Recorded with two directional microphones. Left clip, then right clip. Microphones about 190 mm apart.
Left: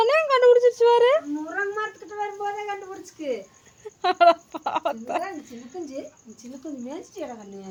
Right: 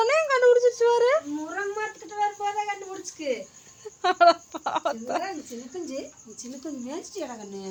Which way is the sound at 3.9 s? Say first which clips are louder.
Left 1 dB; 5° left (ahead or behind).